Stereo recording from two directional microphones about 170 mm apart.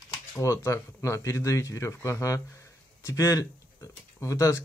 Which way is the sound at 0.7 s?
15° left (ahead or behind).